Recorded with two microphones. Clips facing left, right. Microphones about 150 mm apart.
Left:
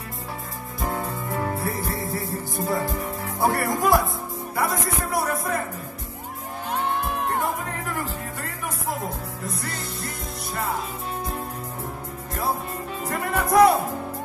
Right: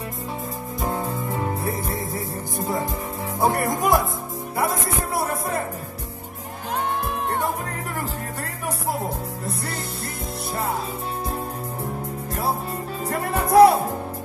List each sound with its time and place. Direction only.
0.7 s music: 20° right (ahead or behind)
3.3 s music: 20° right (ahead or behind)
13.0 s music: 30° right (ahead or behind)